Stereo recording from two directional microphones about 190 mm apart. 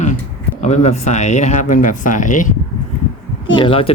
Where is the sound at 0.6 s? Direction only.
35° left (ahead or behind).